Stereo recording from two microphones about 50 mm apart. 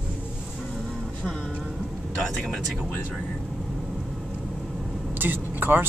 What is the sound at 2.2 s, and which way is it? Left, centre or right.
Speech, centre.